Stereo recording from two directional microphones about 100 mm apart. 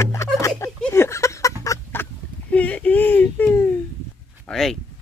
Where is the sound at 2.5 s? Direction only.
15° left (ahead or behind).